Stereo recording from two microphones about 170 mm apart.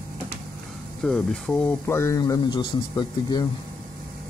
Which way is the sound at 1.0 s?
5° left (ahead or behind).